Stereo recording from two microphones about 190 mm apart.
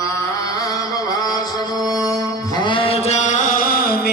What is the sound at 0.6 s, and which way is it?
Music, 20° left (ahead or behind).